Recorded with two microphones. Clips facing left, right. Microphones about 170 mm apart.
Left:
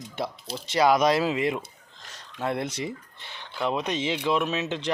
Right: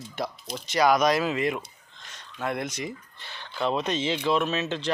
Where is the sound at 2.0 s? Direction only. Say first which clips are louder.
Left 1 dB; 35° left (ahead or behind); by 4.9 s 15° left (ahead or behind).